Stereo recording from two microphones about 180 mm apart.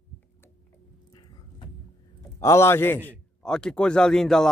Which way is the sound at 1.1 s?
30° left (ahead or behind).